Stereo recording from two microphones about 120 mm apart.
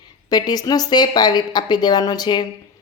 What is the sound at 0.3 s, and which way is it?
A woman's voice, 35° left (ahead or behind).